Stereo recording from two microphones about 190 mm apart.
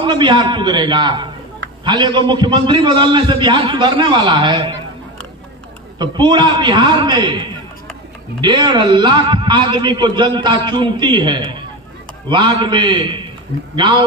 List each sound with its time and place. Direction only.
0.0 s a man's voice: 25° right (ahead or behind)
5.9 s a man's voice: 25° right (ahead or behind)